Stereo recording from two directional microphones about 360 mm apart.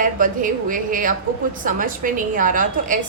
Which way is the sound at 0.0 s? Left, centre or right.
Right.